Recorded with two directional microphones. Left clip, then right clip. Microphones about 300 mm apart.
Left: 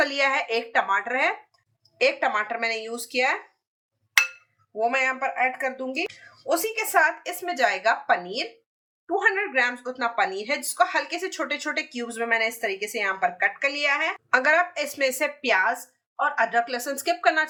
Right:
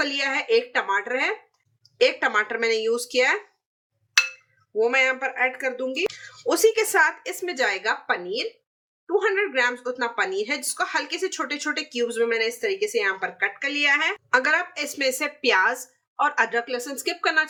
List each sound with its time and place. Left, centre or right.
0.0 s speech: centre
4.8 s speech: centre